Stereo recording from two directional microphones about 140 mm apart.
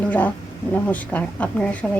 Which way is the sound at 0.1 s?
10° left (ahead or behind).